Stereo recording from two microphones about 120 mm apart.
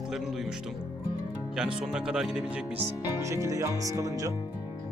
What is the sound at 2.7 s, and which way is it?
Speech, 25° right (ahead or behind).